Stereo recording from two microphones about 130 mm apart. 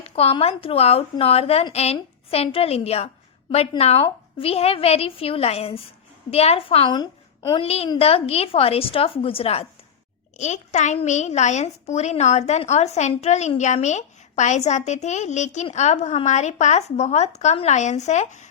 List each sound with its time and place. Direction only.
0.0 s a woman's voice: 50° left (ahead or behind); by 7.6 s 35° left (ahead or behind)
7.6 s a woman's voice: 50° left (ahead or behind)
10.3 s a woman's voice: 65° left (ahead or behind)